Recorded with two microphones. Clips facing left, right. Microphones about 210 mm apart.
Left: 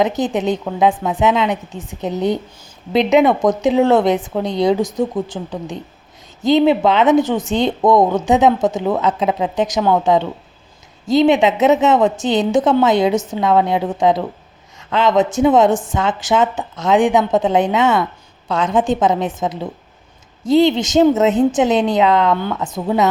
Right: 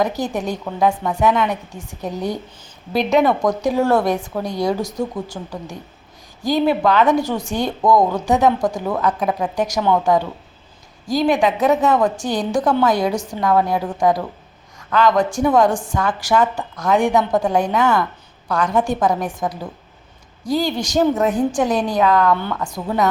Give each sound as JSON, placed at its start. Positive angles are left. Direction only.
{"t": 0.0, "sound": "a woman's voice", "side_deg": 20}